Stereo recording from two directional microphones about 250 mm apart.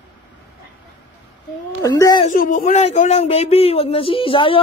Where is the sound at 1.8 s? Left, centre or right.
Centre.